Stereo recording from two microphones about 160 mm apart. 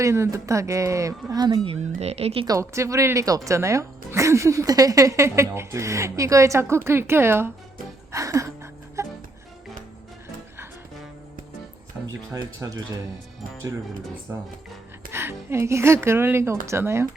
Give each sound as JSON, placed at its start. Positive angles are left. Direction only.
{"t": 0.0, "sound": "a woman's voice", "side_deg": -20}
{"t": 2.5, "sound": "a woman's voice", "side_deg": -20}
{"t": 8.1, "sound": "music", "side_deg": -20}
{"t": 12.0, "sound": "a woman's voice", "side_deg": -20}
{"t": 14.3, "sound": "a woman's voice", "side_deg": -15}